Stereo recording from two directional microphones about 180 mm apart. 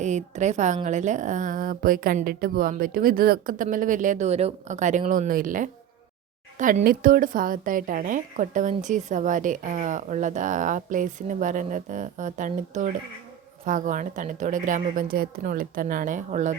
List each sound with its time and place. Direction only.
0.0 s a woman's voice: 40° right (ahead or behind)